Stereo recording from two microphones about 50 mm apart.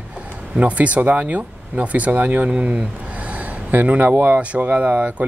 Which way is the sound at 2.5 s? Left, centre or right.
Right.